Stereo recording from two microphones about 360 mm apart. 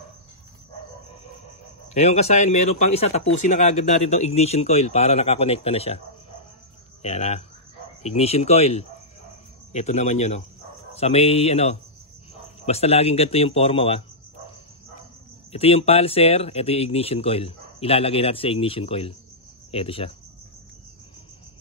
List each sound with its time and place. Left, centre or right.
2.0 s speech: centre
7.0 s speech: centre
15.5 s speech: centre